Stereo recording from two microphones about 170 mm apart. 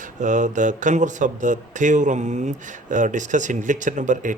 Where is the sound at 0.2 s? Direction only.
45° right (ahead or behind).